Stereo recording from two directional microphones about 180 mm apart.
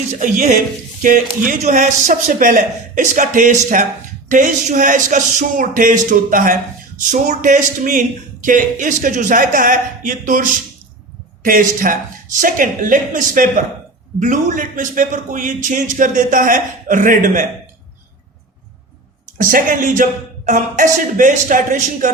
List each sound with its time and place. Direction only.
0.1 s speech: 45° right (ahead or behind)
19.4 s speech: 50° right (ahead or behind)